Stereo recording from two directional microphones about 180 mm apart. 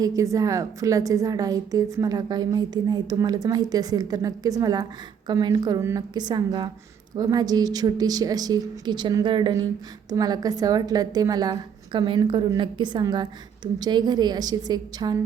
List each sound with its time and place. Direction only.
0.0 s a woman's voice: 20° right (ahead or behind)